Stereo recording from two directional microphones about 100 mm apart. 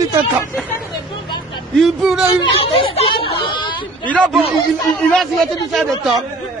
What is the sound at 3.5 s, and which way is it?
Speech, 50° left (ahead or behind).